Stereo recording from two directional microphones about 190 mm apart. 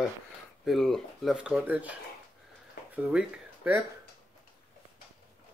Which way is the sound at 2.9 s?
5° right (ahead or behind).